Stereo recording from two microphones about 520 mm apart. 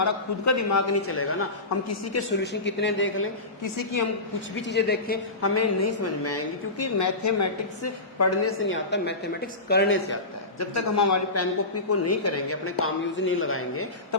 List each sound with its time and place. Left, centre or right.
0.0 s a woman's voice: left
3.6 s a woman's voice: left
4.5 s a woman's voice: centre
5.5 s a woman's voice: left
10.6 s a woman's voice: left